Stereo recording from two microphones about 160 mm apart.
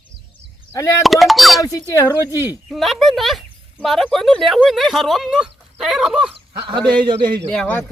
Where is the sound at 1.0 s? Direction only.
Centre (ahead or behind).